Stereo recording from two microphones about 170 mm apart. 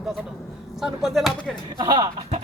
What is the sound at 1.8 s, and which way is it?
Speech, 30° right (ahead or behind).